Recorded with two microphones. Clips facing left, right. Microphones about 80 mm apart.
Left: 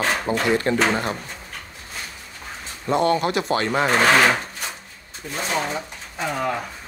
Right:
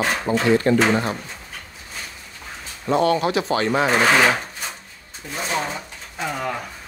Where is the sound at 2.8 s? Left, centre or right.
Centre.